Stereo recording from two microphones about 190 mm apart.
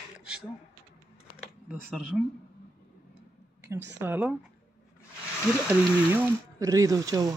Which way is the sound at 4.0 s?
10° right (ahead or behind).